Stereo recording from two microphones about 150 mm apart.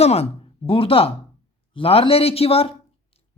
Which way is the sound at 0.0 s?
45° left (ahead or behind).